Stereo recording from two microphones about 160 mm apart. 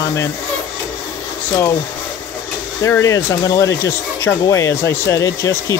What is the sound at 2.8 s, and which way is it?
Speech, 20° left (ahead or behind).